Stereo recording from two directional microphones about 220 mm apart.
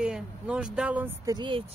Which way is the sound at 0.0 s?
5° right (ahead or behind).